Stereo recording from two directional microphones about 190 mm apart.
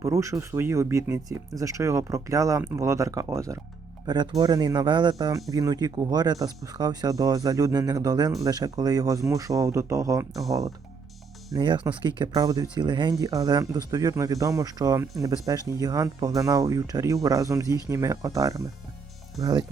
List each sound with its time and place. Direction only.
0.0 s speech: 15° right (ahead or behind)
11.5 s speech: 25° right (ahead or behind)